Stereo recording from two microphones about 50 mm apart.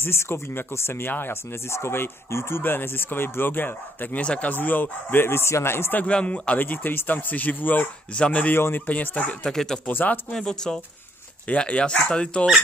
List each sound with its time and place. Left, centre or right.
0.0 s speech: left
4.2 s speech: left
5.2 s speech: left
5.9 s speech: left
6.6 s speech: left
8.5 s speech: left
8.8 s speech: left
9.4 s speech: centre
9.8 s speech: left
10.3 s speech: centre
11.4 s speech: left